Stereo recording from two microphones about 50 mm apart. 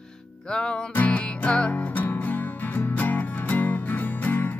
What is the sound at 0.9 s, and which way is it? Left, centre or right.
Music, left.